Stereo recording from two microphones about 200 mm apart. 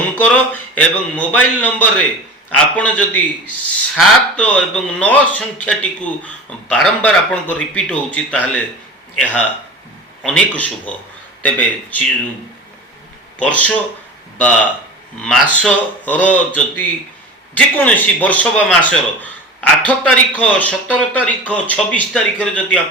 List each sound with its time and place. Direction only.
0.2 s a man's voice: 5° left (ahead or behind)
10.2 s a man's voice: 5° left (ahead or behind)
13.4 s a man's voice: 5° left (ahead or behind)
17.7 s a man's voice: 10° left (ahead or behind)